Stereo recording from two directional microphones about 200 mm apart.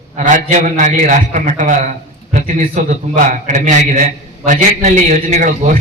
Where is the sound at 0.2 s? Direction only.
40° right (ahead or behind).